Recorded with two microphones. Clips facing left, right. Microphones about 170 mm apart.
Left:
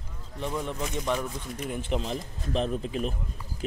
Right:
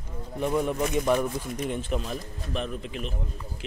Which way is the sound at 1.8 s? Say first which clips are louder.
Even; 20° left (ahead or behind).